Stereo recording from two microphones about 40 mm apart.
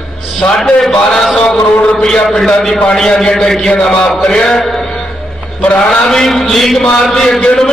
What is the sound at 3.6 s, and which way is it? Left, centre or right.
A man's voice, left.